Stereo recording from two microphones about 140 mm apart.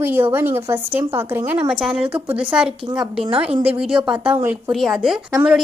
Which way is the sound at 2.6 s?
35° right (ahead or behind).